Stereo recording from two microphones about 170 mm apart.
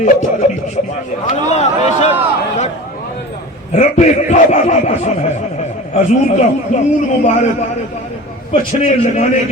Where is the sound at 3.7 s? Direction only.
45° left (ahead or behind).